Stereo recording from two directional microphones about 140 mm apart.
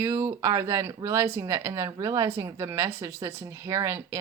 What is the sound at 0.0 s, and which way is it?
Speech, 15° right (ahead or behind).